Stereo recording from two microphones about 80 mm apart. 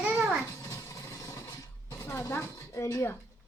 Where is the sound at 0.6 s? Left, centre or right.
Left.